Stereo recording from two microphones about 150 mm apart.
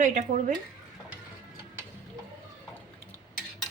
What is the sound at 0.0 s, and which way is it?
Speech, 55° right (ahead or behind).